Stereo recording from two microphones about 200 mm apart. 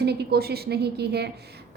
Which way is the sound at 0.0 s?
55° right (ahead or behind).